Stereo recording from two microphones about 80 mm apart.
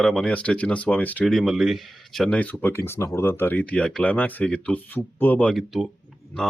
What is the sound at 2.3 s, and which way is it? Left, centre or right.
Speech, centre.